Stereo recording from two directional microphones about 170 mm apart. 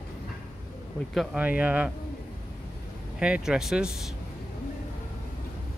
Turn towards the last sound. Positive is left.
turn(degrees=-5)  # may be behind; listen again after turning